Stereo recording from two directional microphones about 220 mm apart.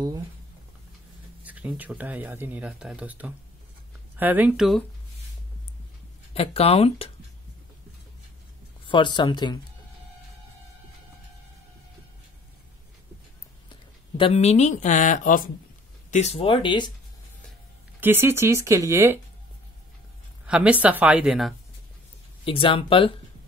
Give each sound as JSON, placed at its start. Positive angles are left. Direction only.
{"t": 1.4, "sound": "a woman's voice", "side_deg": -5}
{"t": 6.3, "sound": "speech", "side_deg": 25}
{"t": 8.8, "sound": "speech", "side_deg": 20}
{"t": 14.1, "sound": "speech", "side_deg": 25}
{"t": 18.0, "sound": "speech", "side_deg": -10}
{"t": 20.4, "sound": "a woman's voice", "side_deg": -5}
{"t": 22.4, "sound": "speech", "side_deg": 25}